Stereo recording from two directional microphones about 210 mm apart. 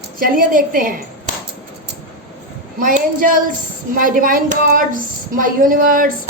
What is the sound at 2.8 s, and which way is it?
A woman's voice, 40° right (ahead or behind).